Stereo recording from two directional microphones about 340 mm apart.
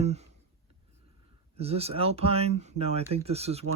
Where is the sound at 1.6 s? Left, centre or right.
Centre.